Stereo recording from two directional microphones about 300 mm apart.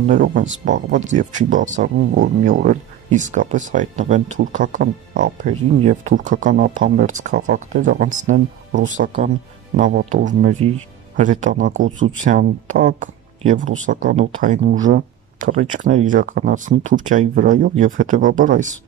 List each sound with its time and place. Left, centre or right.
0.0 s speech: right